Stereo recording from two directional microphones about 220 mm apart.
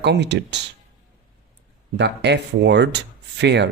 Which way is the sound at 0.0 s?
50° right (ahead or behind).